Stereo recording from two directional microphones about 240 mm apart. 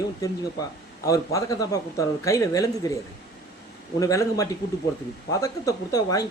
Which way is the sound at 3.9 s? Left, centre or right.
Centre.